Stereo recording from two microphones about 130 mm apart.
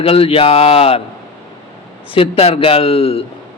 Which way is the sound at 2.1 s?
45° left (ahead or behind).